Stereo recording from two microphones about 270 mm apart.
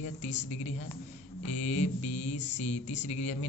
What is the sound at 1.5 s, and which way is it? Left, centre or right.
Speech, left.